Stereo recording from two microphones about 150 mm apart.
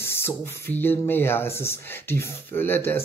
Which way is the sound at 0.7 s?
15° left (ahead or behind).